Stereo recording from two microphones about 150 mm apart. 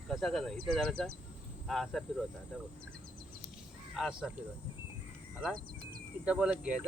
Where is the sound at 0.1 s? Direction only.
Centre (ahead or behind).